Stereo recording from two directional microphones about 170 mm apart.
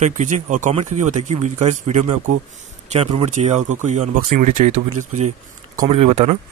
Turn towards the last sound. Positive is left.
turn(degrees=-40)  # may be behind; listen again after turning